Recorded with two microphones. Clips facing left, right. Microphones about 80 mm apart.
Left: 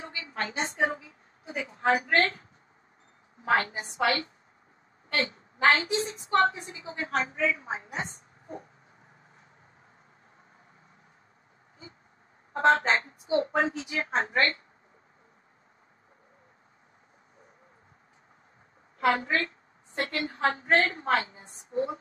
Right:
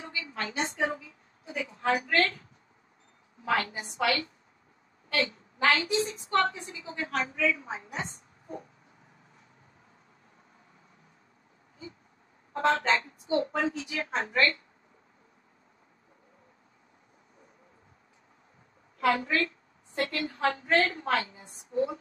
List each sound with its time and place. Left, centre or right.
0.0 s a woman's voice: left
3.4 s a woman's voice: left
12.5 s a woman's voice: left
18.9 s a woman's voice: left